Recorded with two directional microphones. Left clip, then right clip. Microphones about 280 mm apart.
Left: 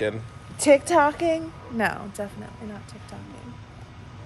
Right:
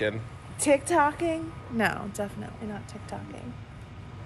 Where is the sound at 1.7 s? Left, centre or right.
Centre.